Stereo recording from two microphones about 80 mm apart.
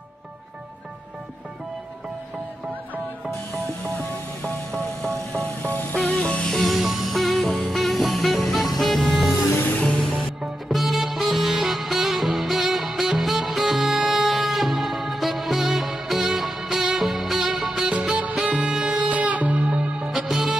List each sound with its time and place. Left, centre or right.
4.4 s music: centre
19.0 s music: centre